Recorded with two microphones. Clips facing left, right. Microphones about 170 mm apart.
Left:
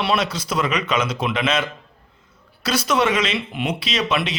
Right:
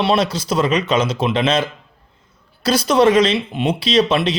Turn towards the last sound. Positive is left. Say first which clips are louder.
# right 7 dB
turn(degrees=-30)  # may be behind; listen again after turning